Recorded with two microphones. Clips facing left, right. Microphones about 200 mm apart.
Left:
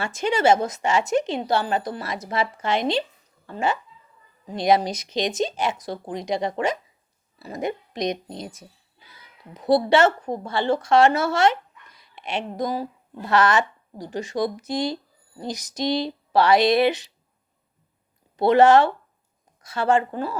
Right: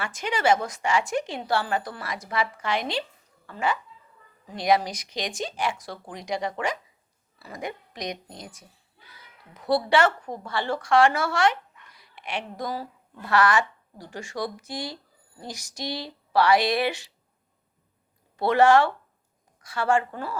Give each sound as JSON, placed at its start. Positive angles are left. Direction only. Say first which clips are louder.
{"t": 0.0, "sound": "a woman's voice", "louder": "left 5 dB", "side_deg": 25}
{"t": 18.3, "sound": "a woman's voice", "louder": "left 4 dB", "side_deg": 20}